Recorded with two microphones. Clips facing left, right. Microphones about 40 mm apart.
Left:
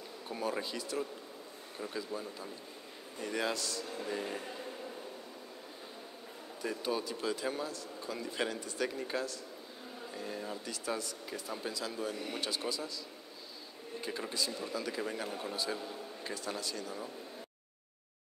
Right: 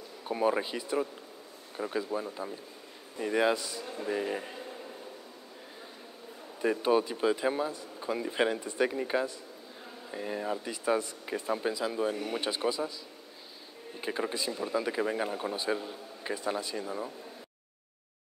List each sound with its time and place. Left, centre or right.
0.3 s a man's voice: right
4.6 s a sound: centre
6.6 s a man's voice: right
14.0 s a man's voice: right